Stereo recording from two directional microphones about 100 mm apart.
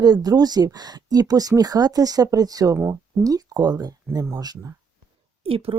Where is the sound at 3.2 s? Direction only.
40° right (ahead or behind).